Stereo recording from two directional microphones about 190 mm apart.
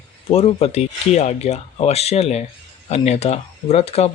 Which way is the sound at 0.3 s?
30° left (ahead or behind).